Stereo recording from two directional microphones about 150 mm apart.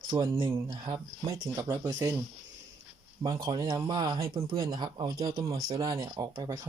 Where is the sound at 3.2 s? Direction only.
25° right (ahead or behind).